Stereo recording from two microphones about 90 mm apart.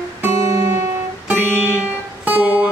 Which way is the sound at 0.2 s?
25° right (ahead or behind).